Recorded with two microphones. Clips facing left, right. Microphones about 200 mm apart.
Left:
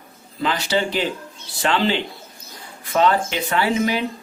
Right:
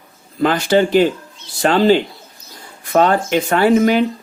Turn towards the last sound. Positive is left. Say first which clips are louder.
# right 8 dB
turn(degrees=-50)  # may be behind; listen again after turning